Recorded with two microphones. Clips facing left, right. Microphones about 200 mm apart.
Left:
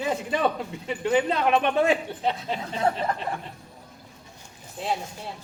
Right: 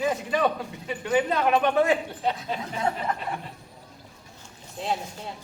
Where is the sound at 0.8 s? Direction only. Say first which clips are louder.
Left 1 dB; 25° left (ahead or behind).